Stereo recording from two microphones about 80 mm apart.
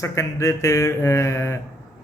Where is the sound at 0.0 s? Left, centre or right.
Left.